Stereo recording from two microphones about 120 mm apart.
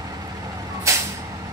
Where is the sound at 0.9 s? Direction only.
25° right (ahead or behind).